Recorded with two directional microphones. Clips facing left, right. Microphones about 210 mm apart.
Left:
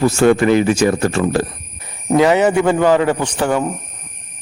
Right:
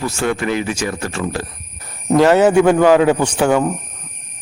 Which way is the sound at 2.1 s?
Centre (ahead or behind).